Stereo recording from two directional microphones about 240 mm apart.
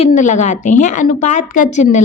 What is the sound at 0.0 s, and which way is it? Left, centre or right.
A woman's voice, left.